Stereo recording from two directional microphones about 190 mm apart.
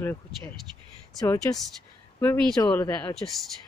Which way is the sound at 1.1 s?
20° left (ahead or behind).